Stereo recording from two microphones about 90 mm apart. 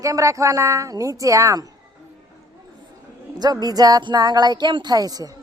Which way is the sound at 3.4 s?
50° right (ahead or behind).